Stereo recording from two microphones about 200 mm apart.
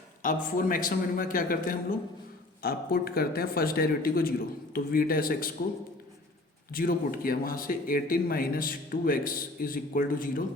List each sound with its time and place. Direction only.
0.2 s speech: 40° left (ahead or behind)
6.7 s speech: 45° left (ahead or behind)